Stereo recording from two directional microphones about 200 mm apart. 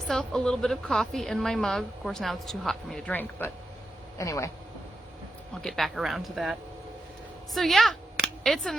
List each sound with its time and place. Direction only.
0.1 s a woman's voice: 5° left (ahead or behind)
5.6 s a woman's voice: centre (ahead or behind)